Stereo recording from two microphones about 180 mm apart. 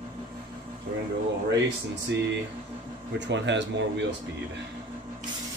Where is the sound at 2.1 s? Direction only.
75° right (ahead or behind).